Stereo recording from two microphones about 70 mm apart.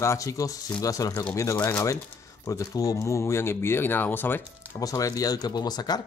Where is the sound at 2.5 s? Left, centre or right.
Left.